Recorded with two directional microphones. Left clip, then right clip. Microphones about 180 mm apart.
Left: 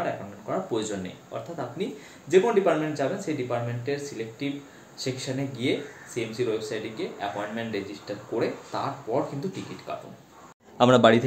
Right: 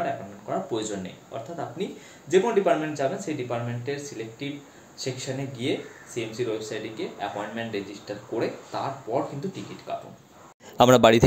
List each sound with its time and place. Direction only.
0.0 s a sound: centre (ahead or behind)
1.3 s speech: centre (ahead or behind)
10.8 s a man's voice: 35° right (ahead or behind)